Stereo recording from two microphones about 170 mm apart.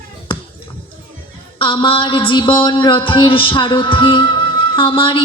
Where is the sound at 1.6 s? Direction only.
30° left (ahead or behind).